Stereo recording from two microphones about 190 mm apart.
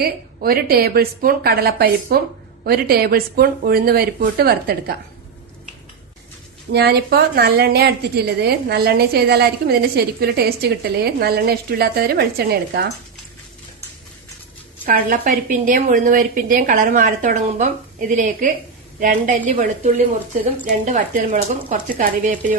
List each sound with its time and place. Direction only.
0.0 s a woman's voice: 55° right (ahead or behind)
6.7 s a woman's voice: 55° right (ahead or behind)
14.8 s a woman's voice: 45° right (ahead or behind)